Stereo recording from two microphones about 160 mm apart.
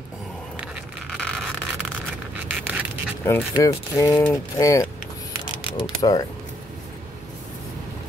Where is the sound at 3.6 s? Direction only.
20° left (ahead or behind).